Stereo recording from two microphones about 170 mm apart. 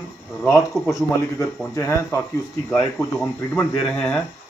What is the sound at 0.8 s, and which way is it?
Speech, centre (ahead or behind).